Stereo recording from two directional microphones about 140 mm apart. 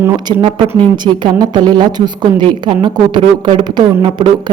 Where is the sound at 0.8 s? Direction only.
35° right (ahead or behind).